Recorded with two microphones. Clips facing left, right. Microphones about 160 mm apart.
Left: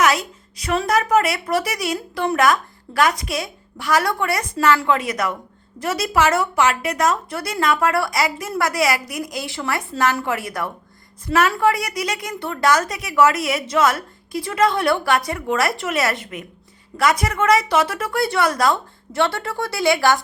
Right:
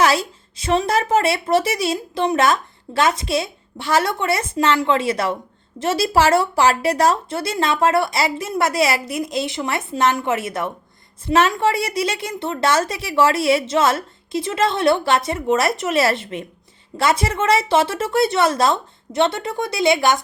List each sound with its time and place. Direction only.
0.0 s a woman's voice: 30° right (ahead or behind)